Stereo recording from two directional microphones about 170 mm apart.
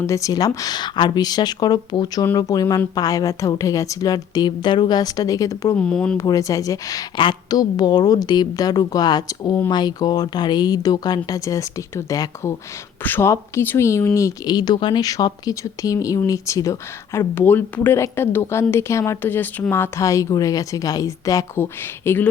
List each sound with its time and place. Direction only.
0.0 s a woman's voice: 20° left (ahead or behind)
5.8 s speech: 5° left (ahead or behind)
6.1 s a woman's voice: 20° left (ahead or behind)